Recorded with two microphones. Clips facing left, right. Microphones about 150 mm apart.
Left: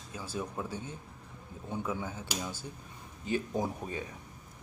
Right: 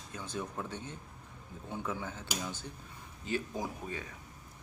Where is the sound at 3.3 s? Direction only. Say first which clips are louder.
Left 4 dB; 20° left (ahead or behind).